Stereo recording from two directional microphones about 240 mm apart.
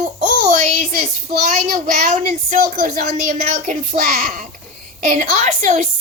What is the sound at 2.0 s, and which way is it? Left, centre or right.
Speech, right.